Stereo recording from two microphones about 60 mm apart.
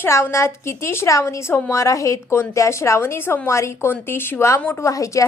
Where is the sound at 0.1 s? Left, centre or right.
Left.